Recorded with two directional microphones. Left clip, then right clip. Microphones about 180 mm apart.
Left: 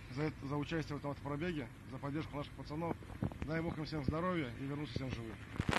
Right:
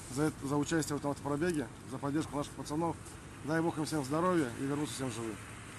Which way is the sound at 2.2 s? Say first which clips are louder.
Right 7 dB; 45° right (ahead or behind).